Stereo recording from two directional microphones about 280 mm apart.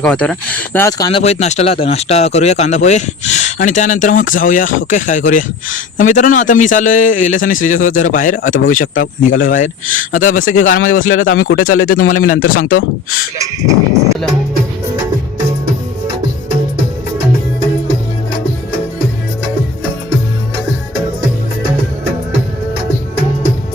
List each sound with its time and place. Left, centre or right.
0.0 s speech: centre; by 12.0 s left
12.5 s speech: left